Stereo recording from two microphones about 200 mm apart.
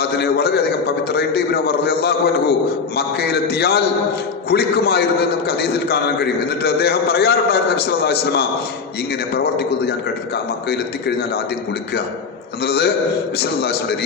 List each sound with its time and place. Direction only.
0.0 s a man's voice: 55° left (ahead or behind)
12.6 s a man's voice: 55° left (ahead or behind)